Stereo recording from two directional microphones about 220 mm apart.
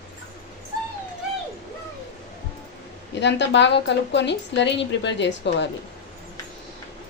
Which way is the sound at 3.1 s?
55° left (ahead or behind).